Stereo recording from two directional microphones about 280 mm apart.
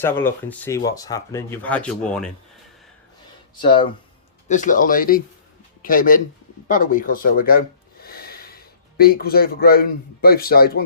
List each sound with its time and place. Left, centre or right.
0.0 s speech: centre
3.5 s speech: centre; by 10.8 s left